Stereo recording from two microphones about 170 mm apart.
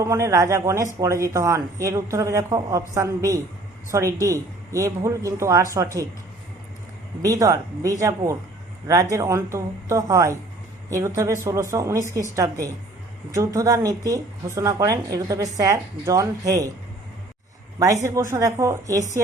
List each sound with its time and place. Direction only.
0.0 s speech: 20° right (ahead or behind)
7.2 s speech: 20° right (ahead or behind)
18.0 s speech: 15° right (ahead or behind)